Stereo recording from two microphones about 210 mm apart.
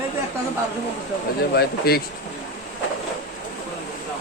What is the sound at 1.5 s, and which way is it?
Speech, 45° left (ahead or behind).